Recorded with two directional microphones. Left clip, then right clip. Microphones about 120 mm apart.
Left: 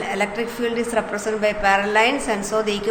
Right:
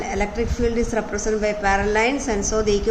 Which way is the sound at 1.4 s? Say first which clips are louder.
Left 3 dB; 45° right (ahead or behind).